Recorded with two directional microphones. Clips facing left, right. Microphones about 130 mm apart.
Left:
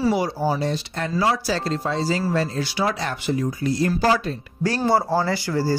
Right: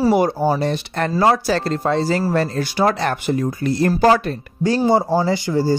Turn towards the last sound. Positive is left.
turn(degrees=-20)  # may be behind; listen again after turning